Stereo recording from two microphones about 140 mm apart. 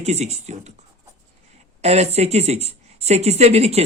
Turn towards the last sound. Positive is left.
turn(degrees=-50)  # may be behind; listen again after turning